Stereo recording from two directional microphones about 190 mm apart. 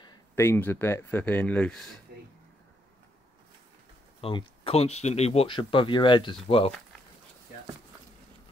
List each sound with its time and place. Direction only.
0.0 s speech: 20° left (ahead or behind); by 2.0 s 5° left (ahead or behind)
4.2 s speech: 30° left (ahead or behind)